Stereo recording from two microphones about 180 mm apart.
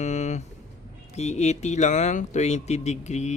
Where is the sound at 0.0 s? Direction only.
40° left (ahead or behind).